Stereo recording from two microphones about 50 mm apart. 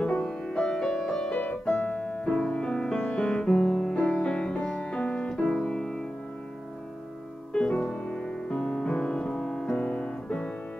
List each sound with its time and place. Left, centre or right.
0.0 s music: centre
1.3 s music: left; by 3.9 s centre
3.9 s music: centre
7.5 s music: centre